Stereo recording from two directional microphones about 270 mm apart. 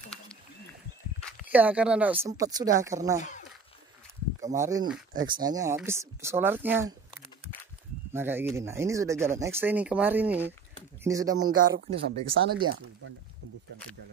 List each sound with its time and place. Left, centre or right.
1.5 s speech: centre
3.2 s speech: left
4.6 s speech: centre
8.1 s speech: centre
11.5 s speech: right
12.6 s speech: right